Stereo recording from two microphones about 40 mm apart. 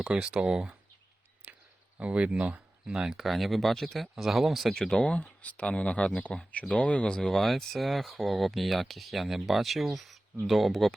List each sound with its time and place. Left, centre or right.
0.0 s speech: right
1.4 s a sound: right
2.0 s speech: right
2.8 s speech: centre
3.2 s speech: centre
4.1 s speech: centre
4.7 s speech: centre
5.2 s speech: left; by 7.3 s centre
7.3 s speech: centre